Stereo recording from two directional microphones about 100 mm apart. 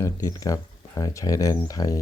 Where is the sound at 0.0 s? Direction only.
35° left (ahead or behind).